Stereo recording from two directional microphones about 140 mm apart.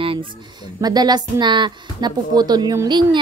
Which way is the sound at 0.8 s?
30° right (ahead or behind).